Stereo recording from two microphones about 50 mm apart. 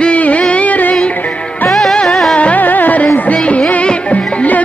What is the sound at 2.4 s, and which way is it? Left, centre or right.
Music, left.